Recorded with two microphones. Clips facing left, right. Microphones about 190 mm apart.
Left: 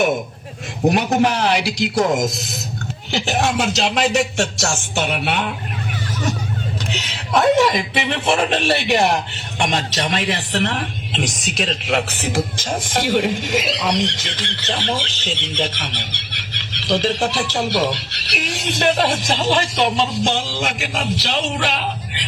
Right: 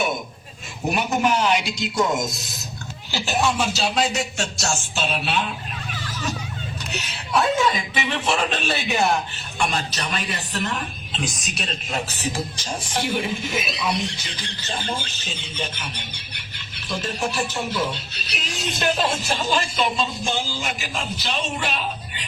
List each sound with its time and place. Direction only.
0.9 s a man's voice: 85° left
3.1 s speech: 90° left; by 5.5 s 70° left (ahead or behind)
6.9 s speech: 80° left
9.6 s a man's voice: 90° left
19.0 s a man's voice: 90° left